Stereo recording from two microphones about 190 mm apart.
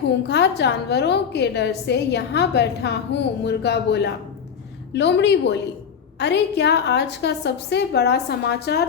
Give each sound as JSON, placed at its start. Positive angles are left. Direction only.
{"t": 0.3, "sound": "a woman's voice", "side_deg": 60}